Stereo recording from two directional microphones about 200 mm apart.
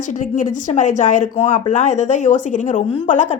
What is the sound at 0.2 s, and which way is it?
A woman's voice, 40° left (ahead or behind).